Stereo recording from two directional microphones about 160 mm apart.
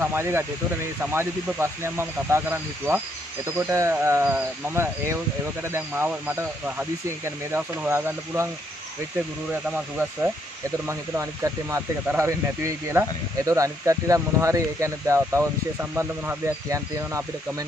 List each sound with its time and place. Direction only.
0.0 s speech: 15° right (ahead or behind)
9.5 s speech: 10° right (ahead or behind)